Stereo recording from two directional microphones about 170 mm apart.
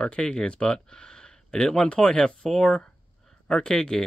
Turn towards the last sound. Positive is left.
turn(degrees=5)  # may be behind; listen again after turning